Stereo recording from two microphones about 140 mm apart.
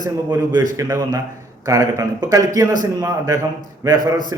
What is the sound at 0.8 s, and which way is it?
A man's voice, 25° right (ahead or behind).